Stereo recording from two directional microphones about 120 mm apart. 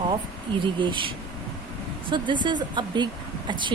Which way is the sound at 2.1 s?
40° right (ahead or behind).